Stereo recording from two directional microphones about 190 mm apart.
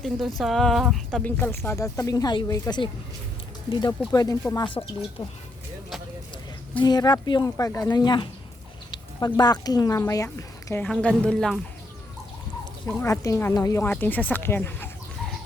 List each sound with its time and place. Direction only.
0.0 s speech: centre (ahead or behind); by 4.9 s 25° left (ahead or behind)
6.8 s speech: 20° left (ahead or behind); by 11.6 s 5° left (ahead or behind)
13.0 s speech: 15° left (ahead or behind)